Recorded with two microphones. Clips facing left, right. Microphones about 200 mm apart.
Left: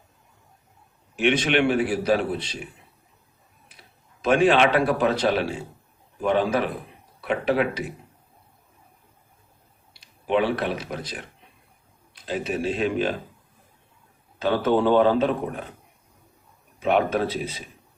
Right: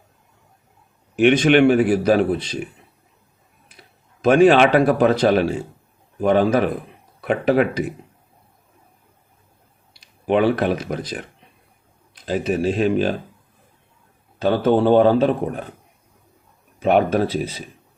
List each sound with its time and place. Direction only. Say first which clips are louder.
1.1 s a man's voice: right 7 dB; 45° right (ahead or behind)
4.2 s a man's voice: right 6 dB; 45° right (ahead or behind)
10.2 s a man's voice: right 5 dB; 45° right (ahead or behind)
12.2 s a man's voice: right 6 dB; 45° right (ahead or behind)
14.4 s a man's voice: right 4 dB; 40° right (ahead or behind)
16.8 s a man's voice: right 5 dB; 40° right (ahead or behind)